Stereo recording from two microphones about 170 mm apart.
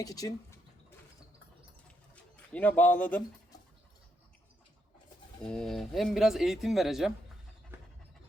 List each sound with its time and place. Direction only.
0.0 s bird: 20° left (ahead or behind)
2.3 s speech: 10° left (ahead or behind)
5.4 s speech: 5° left (ahead or behind)